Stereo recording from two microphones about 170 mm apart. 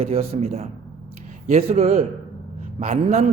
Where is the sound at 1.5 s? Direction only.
35° right (ahead or behind).